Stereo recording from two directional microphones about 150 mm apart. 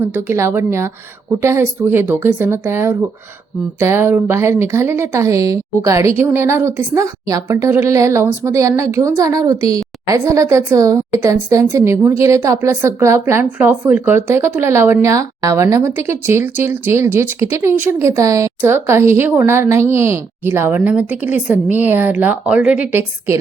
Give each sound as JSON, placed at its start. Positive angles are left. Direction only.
{"t": 0.0, "sound": "a woman's voice", "side_deg": -15}